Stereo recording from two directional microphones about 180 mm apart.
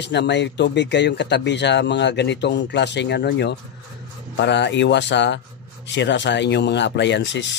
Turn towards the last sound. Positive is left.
turn(degrees=80)